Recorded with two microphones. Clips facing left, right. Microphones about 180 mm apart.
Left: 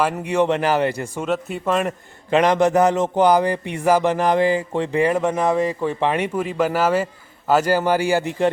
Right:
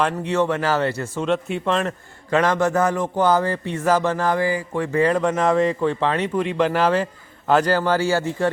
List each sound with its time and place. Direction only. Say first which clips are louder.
0.0 s a man's voice: left 1 dB; 15° left (ahead or behind)
2.3 s a man's voice: left 3 dB; 15° left (ahead or behind)